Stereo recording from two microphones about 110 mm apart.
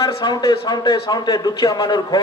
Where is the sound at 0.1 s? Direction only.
40° left (ahead or behind).